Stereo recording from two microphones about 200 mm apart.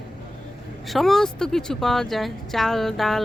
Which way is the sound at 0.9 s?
Centre (ahead or behind).